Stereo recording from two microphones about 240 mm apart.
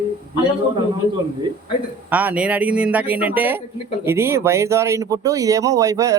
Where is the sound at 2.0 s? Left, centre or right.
Centre.